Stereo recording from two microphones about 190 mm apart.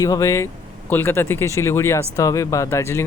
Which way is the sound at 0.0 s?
20° left (ahead or behind).